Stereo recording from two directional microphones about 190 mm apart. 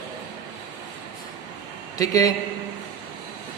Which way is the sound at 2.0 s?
20° left (ahead or behind).